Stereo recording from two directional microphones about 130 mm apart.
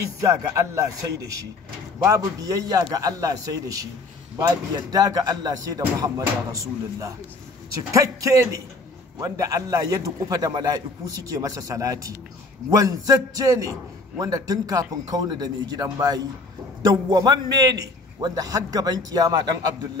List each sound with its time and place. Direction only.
0.2 s a man's voice: 25° right (ahead or behind)